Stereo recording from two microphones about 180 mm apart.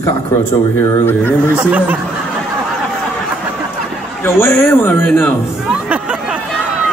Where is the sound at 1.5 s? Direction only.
10° right (ahead or behind).